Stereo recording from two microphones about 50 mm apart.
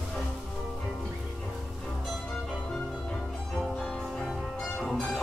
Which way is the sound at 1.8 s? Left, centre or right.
Centre.